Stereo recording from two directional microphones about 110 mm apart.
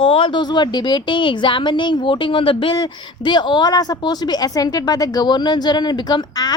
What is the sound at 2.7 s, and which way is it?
A woman's voice, 40° left (ahead or behind).